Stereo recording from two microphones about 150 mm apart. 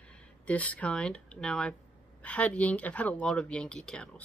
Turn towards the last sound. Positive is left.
turn(degrees=5)  # may be behind; listen again after turning